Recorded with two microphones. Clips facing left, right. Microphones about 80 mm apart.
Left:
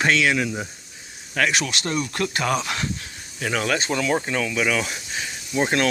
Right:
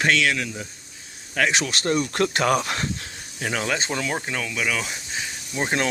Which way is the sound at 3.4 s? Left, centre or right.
Centre.